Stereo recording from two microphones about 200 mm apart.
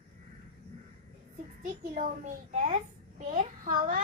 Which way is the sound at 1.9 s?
40° right (ahead or behind).